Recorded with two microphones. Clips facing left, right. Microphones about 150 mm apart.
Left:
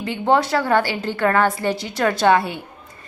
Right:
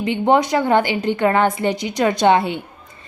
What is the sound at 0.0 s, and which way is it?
A woman's voice, 20° right (ahead or behind).